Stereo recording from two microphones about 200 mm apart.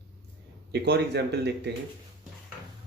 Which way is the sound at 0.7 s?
55° right (ahead or behind).